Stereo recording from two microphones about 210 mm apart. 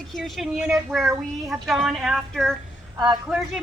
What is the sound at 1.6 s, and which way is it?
Speech, centre (ahead or behind).